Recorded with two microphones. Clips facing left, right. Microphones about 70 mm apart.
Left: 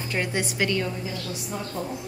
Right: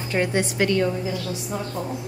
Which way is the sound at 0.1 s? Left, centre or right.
Right.